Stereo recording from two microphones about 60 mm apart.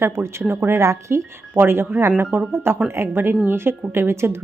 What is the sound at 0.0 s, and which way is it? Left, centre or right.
Speech, right.